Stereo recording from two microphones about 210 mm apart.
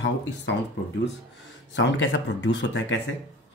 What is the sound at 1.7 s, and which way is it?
Speech, 60° left (ahead or behind).